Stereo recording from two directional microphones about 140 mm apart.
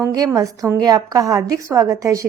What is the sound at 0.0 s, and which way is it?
A woman's voice, 20° right (ahead or behind).